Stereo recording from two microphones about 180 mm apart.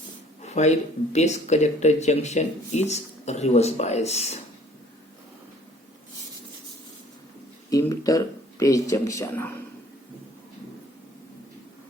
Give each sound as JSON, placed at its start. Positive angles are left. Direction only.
{"t": 0.4, "sound": "speech", "side_deg": 40}
{"t": 7.7, "sound": "speech", "side_deg": 20}